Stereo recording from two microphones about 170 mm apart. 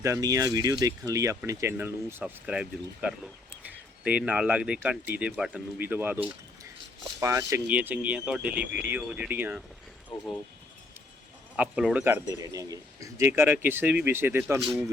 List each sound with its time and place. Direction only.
0.0 s a man's voice: 20° right (ahead or behind)
7.2 s a man's voice: 15° right (ahead or behind)
11.5 s a man's voice: 10° right (ahead or behind)